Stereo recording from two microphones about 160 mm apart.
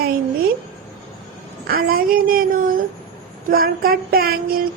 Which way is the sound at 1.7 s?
65° right (ahead or behind).